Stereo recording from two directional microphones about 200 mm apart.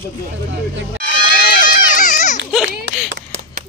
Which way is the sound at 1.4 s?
45° left (ahead or behind).